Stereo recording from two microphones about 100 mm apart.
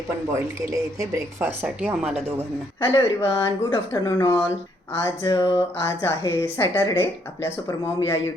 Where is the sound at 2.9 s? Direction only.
30° left (ahead or behind).